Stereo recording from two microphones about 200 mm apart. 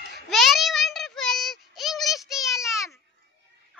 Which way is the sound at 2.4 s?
15° left (ahead or behind).